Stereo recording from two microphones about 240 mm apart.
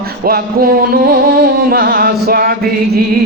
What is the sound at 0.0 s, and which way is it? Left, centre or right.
A man's voice, right.